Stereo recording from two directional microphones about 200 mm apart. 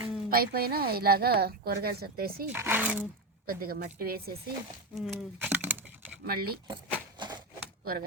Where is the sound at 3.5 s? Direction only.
45° right (ahead or behind).